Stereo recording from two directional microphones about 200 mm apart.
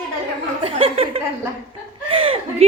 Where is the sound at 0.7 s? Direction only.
30° right (ahead or behind).